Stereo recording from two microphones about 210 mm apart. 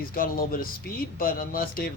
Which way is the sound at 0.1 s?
45° left (ahead or behind).